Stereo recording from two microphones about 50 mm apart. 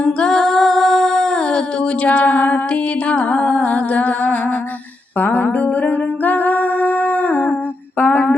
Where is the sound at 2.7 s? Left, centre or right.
Left.